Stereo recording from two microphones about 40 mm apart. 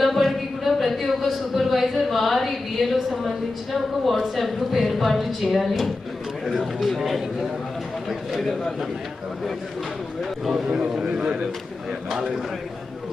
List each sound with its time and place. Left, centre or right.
0.0 s a sound: centre
4.4 s a woman's voice: centre
10.7 s a man's voice: centre